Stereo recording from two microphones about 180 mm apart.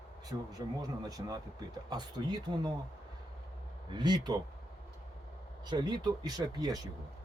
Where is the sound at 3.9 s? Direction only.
20° right (ahead or behind).